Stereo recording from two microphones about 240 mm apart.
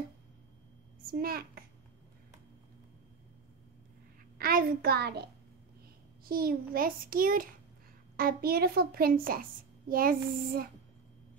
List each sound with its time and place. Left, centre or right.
1.1 s a child's voice: right
4.4 s a child's voice: right